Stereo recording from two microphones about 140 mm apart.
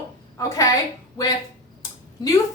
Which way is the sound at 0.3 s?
25° left (ahead or behind).